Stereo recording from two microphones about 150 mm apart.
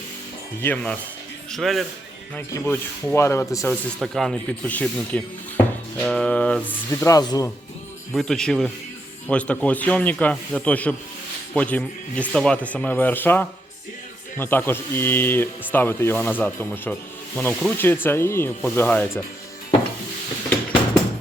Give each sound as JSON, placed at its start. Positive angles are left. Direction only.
{"t": 0.6, "sound": "speech", "side_deg": 10}
{"t": 2.5, "sound": "speech", "side_deg": 15}
{"t": 4.0, "sound": "speech", "side_deg": 0}
{"t": 6.9, "sound": "speech", "side_deg": 20}
{"t": 8.1, "sound": "speech", "side_deg": 5}